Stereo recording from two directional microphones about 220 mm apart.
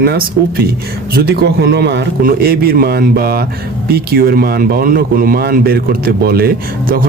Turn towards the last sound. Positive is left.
turn(degrees=-40)  # may be behind; listen again after turning